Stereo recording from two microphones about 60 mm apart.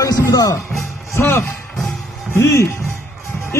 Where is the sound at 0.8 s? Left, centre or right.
Left.